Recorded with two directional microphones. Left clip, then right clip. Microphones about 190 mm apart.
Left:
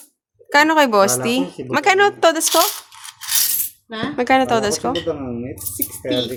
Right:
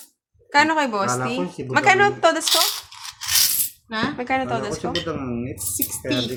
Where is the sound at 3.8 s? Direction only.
35° right (ahead or behind).